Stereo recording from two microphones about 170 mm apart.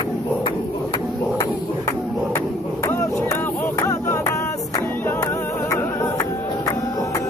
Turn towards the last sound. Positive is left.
turn(degrees=15)  # may be behind; listen again after turning